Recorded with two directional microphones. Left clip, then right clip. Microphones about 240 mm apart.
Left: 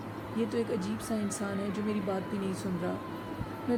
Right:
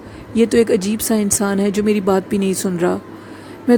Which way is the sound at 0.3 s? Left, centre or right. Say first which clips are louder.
Right 18 dB; right.